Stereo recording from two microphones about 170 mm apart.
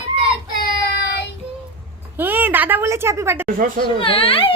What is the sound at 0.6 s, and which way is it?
Child singing, 70° left (ahead or behind).